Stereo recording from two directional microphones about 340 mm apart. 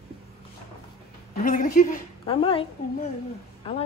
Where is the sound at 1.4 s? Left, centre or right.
Left.